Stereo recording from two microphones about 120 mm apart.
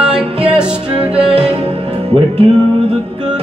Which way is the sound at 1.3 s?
50° right (ahead or behind).